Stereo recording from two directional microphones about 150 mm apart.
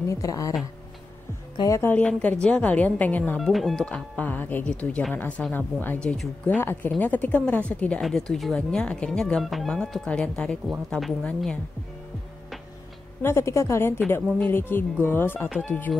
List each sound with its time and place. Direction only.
0.1 s speech: 20° left (ahead or behind)
1.6 s speech: 20° left (ahead or behind); by 11.5 s centre (ahead or behind)
13.2 s speech: 15° left (ahead or behind)